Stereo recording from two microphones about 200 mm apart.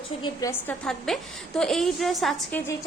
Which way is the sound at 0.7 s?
Centre (ahead or behind).